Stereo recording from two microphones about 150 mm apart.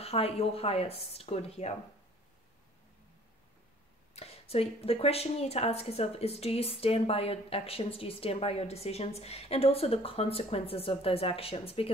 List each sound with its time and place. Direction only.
0.0 s speech: 40° left (ahead or behind)
4.1 s a woman's voice: 40° left (ahead or behind)